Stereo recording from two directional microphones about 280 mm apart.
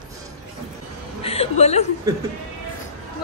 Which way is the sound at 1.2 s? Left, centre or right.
Left.